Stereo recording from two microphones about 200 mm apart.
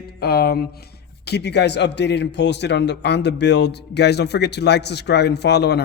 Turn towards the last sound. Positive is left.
turn(degrees=55)  # may be behind; listen again after turning